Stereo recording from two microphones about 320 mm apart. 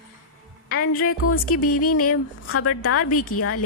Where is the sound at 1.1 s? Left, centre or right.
Left.